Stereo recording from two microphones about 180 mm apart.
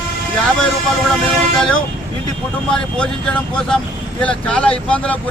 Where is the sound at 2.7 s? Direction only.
5° left (ahead or behind).